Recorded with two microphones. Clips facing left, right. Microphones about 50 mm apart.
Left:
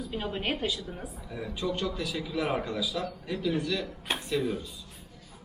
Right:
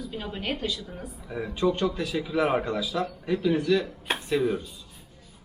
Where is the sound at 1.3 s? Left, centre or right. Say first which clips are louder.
Right 7 dB; right.